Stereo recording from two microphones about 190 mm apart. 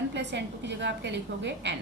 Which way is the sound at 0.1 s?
65° right (ahead or behind).